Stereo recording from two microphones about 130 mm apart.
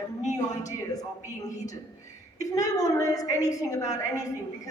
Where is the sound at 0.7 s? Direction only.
25° left (ahead or behind).